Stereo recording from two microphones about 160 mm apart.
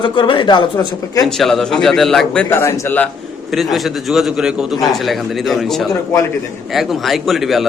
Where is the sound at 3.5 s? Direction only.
Centre (ahead or behind).